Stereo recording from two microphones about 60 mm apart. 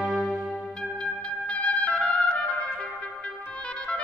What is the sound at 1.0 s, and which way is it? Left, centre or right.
Music, centre.